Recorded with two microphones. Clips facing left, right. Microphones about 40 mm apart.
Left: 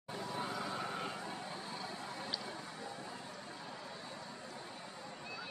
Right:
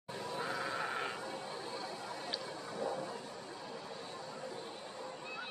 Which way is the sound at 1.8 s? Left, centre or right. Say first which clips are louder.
Right 1 dB; left.